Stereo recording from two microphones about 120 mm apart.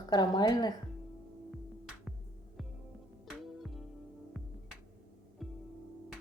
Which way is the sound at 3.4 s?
Centre (ahead or behind).